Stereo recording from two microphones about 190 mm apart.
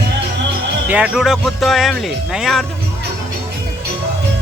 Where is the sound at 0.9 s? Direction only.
5° right (ahead or behind).